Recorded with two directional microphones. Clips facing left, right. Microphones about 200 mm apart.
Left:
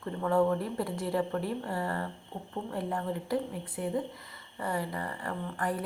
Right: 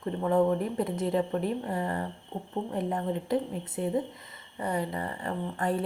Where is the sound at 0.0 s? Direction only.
20° right (ahead or behind).